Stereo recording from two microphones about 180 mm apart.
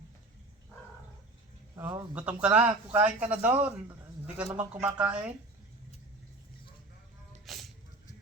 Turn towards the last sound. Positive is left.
turn(degrees=0)  # may be behind; listen again after turning